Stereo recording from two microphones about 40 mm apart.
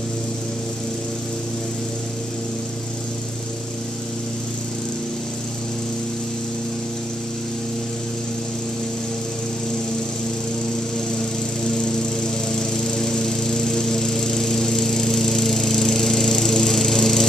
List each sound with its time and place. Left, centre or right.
11.1 s lawn mower: centre